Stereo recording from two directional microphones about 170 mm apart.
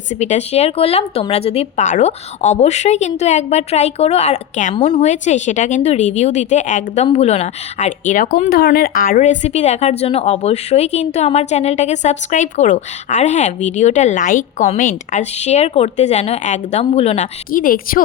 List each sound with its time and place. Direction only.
0.1 s speech: 45° left (ahead or behind)
17.5 s a woman's voice: 55° left (ahead or behind)